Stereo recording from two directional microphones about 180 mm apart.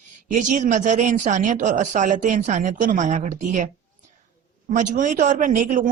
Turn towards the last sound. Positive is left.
turn(degrees=-45)  # may be behind; listen again after turning